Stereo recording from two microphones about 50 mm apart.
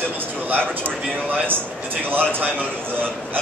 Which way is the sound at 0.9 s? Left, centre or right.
Right.